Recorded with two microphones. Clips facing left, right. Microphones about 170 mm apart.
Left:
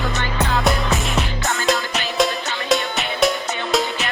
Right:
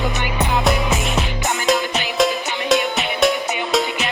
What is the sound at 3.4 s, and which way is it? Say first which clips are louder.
Music: right 2 dB; 20° right (ahead or behind).